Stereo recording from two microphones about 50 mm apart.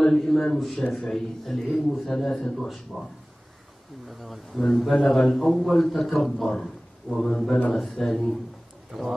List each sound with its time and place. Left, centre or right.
0.0 s a man's voice: centre
4.2 s a man's voice: centre